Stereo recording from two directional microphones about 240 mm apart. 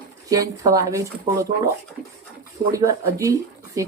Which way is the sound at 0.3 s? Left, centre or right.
Centre.